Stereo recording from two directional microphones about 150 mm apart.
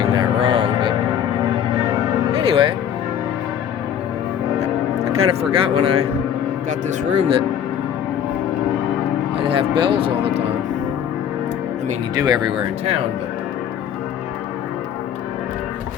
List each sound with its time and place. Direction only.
0.0 s music: 30° right (ahead or behind)
2.5 s music: 35° right (ahead or behind)
4.6 s music: 45° right (ahead or behind)
6.7 s speech: 50° right (ahead or behind)
9.4 s speech: 35° right (ahead or behind)
12.1 s speech: 30° right (ahead or behind)